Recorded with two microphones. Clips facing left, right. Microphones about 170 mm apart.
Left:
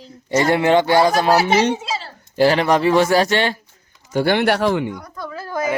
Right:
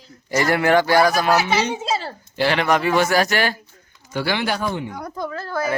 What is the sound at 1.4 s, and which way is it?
Speech, 50° left (ahead or behind).